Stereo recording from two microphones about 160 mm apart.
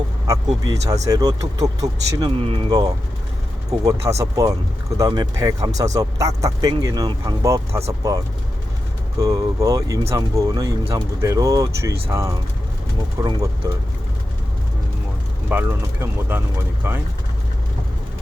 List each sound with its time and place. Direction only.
0.6 s speech: 20° right (ahead or behind)
2.4 s speech: 35° right (ahead or behind); by 7.9 s 20° right (ahead or behind)
9.1 s speech: 20° right (ahead or behind)
15.4 s speech: 10° right (ahead or behind)